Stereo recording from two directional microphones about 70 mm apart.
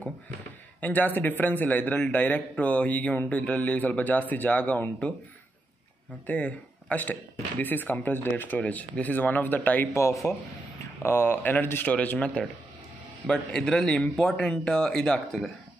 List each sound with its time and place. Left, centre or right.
0.7 s speech: left
6.2 s speech: centre
9.9 s speech: left; by 15.4 s centre